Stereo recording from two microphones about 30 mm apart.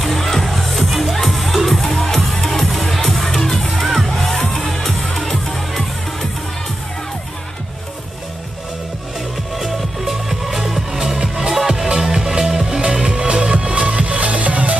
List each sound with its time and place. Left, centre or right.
0.0 s music: centre
9.6 s music: centre; by 14.8 s right